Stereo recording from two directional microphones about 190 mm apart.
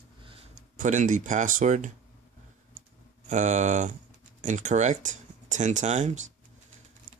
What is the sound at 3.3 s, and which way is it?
Speech, 40° right (ahead or behind).